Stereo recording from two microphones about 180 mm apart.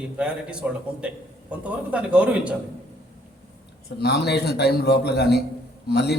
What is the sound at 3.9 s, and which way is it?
A man's voice, 65° left (ahead or behind).